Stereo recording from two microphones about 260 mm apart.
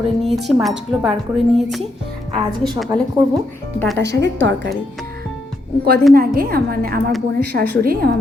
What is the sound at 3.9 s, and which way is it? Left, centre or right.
Speech, right.